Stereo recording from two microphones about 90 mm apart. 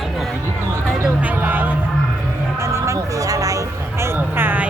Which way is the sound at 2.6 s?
30° right (ahead or behind).